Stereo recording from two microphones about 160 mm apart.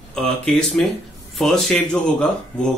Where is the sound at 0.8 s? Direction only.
5° left (ahead or behind).